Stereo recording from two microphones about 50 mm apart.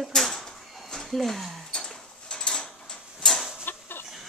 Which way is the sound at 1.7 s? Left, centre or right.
Centre.